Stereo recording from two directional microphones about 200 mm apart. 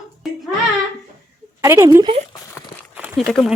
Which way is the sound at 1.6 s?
15° right (ahead or behind).